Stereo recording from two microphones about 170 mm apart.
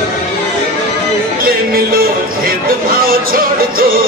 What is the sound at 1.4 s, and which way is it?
Speech, 60° right (ahead or behind).